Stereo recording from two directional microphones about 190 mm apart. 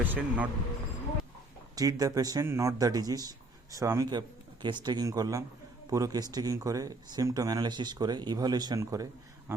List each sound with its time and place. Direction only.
0.0 s speech: 10° right (ahead or behind)
1.7 s speech: 20° right (ahead or behind)